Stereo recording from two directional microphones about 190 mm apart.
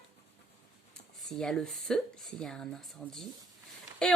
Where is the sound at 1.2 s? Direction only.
Centre (ahead or behind).